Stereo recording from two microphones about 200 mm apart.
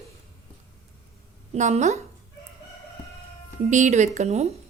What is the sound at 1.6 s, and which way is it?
Speech, 35° right (ahead or behind).